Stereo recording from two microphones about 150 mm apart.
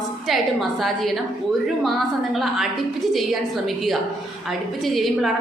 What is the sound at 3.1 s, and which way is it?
A woman's voice, centre (ahead or behind).